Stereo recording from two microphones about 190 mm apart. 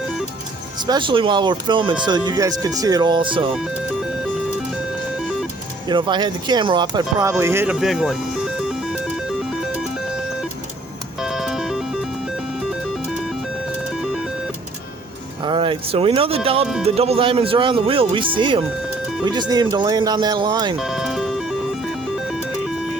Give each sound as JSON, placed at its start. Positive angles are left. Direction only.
{"t": 0.8, "sound": "speech", "side_deg": -25}
{"t": 5.9, "sound": "speech", "side_deg": -25}
{"t": 11.2, "sound": "music", "side_deg": 0}
{"t": 15.4, "sound": "speech", "side_deg": -25}
{"t": 20.7, "sound": "music", "side_deg": 0}